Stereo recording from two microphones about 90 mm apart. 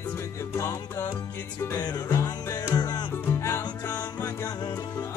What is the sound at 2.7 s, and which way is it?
Music, 50° left (ahead or behind).